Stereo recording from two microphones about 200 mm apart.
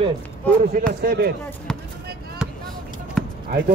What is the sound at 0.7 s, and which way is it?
Speech, 45° right (ahead or behind).